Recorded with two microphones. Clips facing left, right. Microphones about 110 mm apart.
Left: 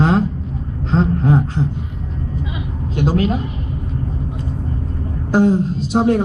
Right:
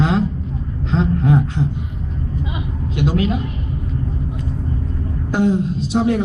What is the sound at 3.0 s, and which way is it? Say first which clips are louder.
Speech: left 2 dB; 35° left (ahead or behind).